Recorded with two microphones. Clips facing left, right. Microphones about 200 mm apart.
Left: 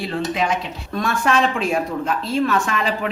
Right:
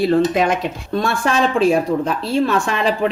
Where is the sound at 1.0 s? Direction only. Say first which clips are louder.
Right 1 dB; 35° right (ahead or behind).